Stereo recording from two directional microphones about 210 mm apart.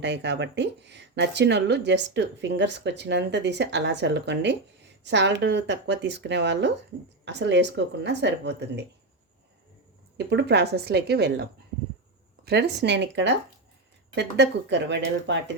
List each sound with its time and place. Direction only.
0.0 s speech: 55° right (ahead or behind)
10.2 s a woman's voice: 55° right (ahead or behind)
12.5 s speech: 55° right (ahead or behind)